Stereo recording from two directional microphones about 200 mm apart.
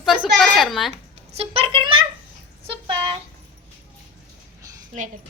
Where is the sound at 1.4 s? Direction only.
30° right (ahead or behind).